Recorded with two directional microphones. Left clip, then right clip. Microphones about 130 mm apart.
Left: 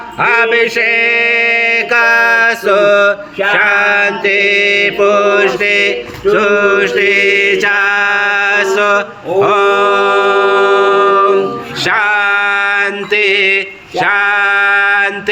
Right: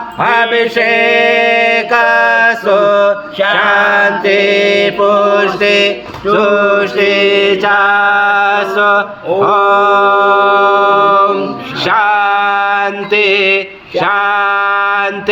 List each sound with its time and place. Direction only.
0.2 s mantra: 15° right (ahead or behind)
14.0 s male singing: 15° right (ahead or behind)